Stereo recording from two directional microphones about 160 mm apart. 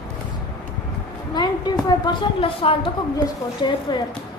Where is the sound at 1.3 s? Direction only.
25° left (ahead or behind).